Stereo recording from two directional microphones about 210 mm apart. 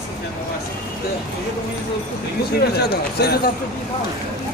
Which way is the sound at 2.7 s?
50° left (ahead or behind).